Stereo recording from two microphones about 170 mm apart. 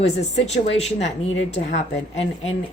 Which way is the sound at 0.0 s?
40° left (ahead or behind).